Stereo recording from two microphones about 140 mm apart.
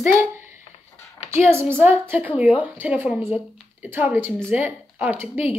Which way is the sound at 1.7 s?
15° right (ahead or behind).